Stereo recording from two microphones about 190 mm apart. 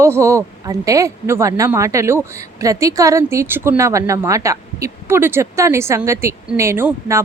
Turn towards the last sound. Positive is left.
turn(degrees=-15)  # may be behind; listen again after turning